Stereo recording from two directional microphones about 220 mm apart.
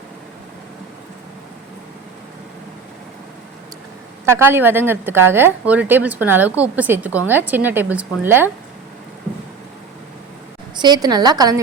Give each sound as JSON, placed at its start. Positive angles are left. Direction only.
{"t": 4.3, "sound": "a woman's voice", "side_deg": -10}
{"t": 10.8, "sound": "a woman's voice", "side_deg": -20}